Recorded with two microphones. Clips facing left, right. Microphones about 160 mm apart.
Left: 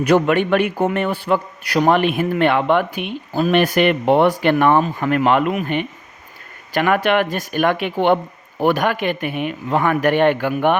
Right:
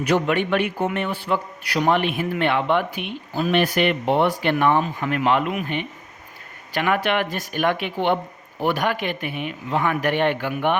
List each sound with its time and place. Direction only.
0.1 s speech: 50° left (ahead or behind)
6.7 s speech: 45° left (ahead or behind)